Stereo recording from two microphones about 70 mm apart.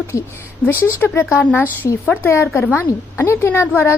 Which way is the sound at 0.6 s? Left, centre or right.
Left.